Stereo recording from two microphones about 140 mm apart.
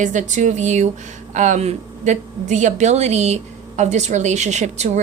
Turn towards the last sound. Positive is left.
turn(degrees=-55)  # may be behind; listen again after turning